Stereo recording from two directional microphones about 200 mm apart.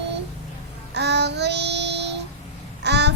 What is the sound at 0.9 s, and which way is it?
Child singing, 60° right (ahead or behind).